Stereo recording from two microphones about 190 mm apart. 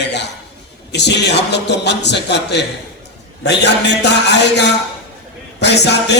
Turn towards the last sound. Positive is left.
turn(degrees=65)  # may be behind; listen again after turning